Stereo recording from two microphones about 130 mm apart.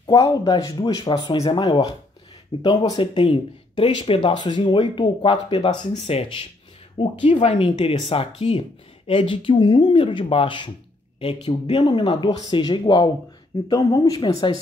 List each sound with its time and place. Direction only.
0.0 s speech: 25° left (ahead or behind)
3.0 s speech: 45° left (ahead or behind)
11.7 s speech: 35° left (ahead or behind)